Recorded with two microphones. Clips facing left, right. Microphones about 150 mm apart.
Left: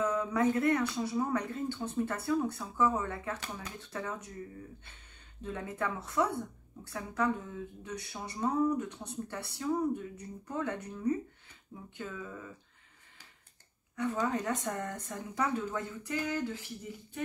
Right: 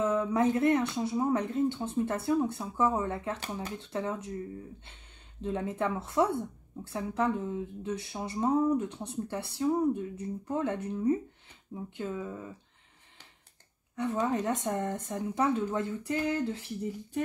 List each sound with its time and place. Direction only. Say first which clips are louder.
0.0 s speech: right 3 dB; 25° right (ahead or behind)
5.4 s speech: right 5 dB; 25° right (ahead or behind)
13.9 s speech: right 3 dB; 25° right (ahead or behind)